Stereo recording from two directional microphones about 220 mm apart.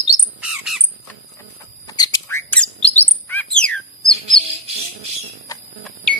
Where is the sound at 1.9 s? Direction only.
15° left (ahead or behind).